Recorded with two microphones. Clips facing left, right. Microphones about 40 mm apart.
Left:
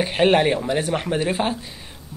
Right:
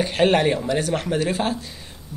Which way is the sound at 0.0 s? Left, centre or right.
Centre.